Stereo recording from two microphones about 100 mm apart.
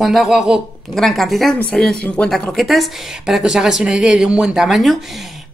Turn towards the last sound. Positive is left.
turn(degrees=0)  # may be behind; listen again after turning